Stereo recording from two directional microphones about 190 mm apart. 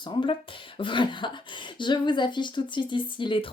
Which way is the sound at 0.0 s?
25° left (ahead or behind).